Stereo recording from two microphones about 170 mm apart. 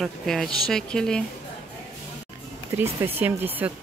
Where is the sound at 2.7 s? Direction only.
15° right (ahead or behind).